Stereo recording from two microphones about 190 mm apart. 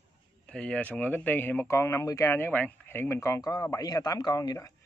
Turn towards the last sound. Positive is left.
turn(degrees=15)  # may be behind; listen again after turning